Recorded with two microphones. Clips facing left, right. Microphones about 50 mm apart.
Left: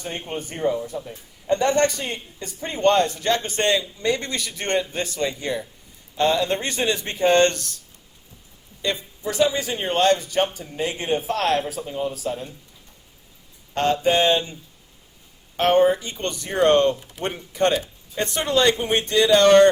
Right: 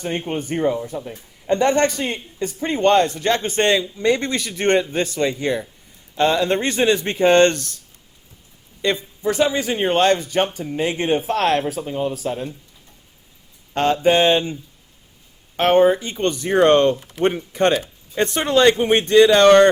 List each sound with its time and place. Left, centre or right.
0.0 s a woman's voice: right
8.8 s a woman's voice: right
13.7 s a woman's voice: right
15.5 s a woman's voice: right